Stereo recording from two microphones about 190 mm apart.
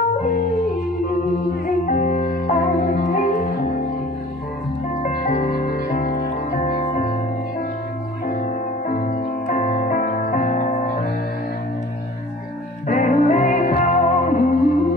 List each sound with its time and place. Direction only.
1.7 s music: 45° left (ahead or behind)
5.0 s music: 45° left (ahead or behind)
8.3 s music: 45° left (ahead or behind)
12.8 s music: 40° left (ahead or behind)